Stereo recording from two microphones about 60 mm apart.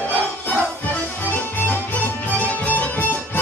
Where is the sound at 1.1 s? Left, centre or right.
Left.